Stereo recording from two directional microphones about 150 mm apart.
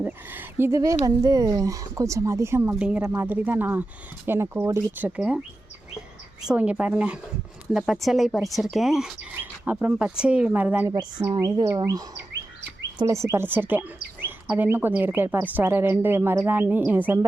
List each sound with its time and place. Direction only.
0.0 s speech: 15° right (ahead or behind)
6.5 s speech: 10° right (ahead or behind)
11.3 s speech: 25° right (ahead or behind)